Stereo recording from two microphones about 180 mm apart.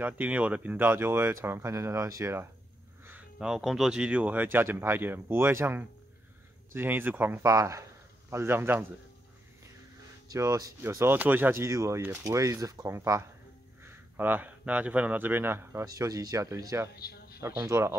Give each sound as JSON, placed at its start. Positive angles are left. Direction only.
{"t": 0.0, "sound": "speech", "side_deg": -10}
{"t": 3.1, "sound": "speech", "side_deg": -5}
{"t": 10.2, "sound": "speech", "side_deg": -20}
{"t": 16.9, "sound": "a sound", "side_deg": 60}
{"t": 17.4, "sound": "speech", "side_deg": -15}